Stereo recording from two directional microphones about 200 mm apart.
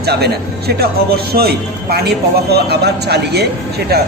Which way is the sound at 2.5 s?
55° right (ahead or behind).